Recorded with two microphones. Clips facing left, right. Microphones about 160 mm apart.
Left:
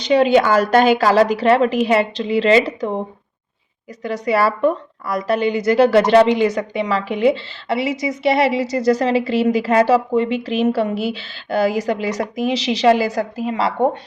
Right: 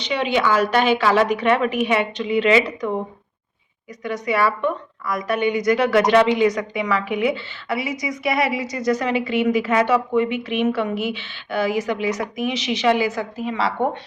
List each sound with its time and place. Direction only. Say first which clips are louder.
0.0 s a woman's voice: left 7 dB; 40° left (ahead or behind)
4.0 s a woman's voice: left 3 dB; 35° left (ahead or behind)